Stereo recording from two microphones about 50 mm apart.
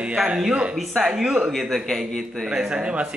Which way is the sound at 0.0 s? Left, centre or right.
Centre.